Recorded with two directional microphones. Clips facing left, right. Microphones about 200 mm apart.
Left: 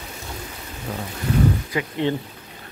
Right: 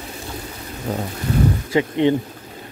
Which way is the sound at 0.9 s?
35° right (ahead or behind).